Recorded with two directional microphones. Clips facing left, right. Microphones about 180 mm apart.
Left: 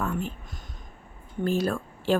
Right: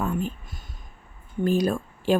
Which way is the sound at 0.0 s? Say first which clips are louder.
Right 3 dB; 15° right (ahead or behind).